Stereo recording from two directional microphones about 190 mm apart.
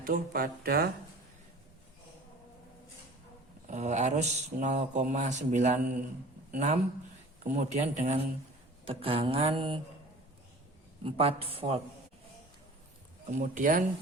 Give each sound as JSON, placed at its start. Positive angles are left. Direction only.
{"t": 0.0, "sound": "speech", "side_deg": -50}
{"t": 3.7, "sound": "a man's voice", "side_deg": -40}
{"t": 8.8, "sound": "mantra", "side_deg": -30}
{"t": 11.0, "sound": "speech", "side_deg": -30}
{"t": 13.2, "sound": "speech", "side_deg": -40}